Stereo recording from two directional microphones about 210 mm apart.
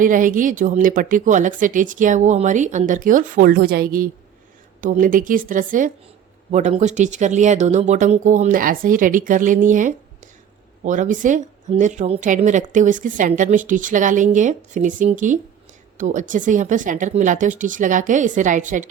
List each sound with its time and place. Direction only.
0.0 s a woman's voice: 40° right (ahead or behind)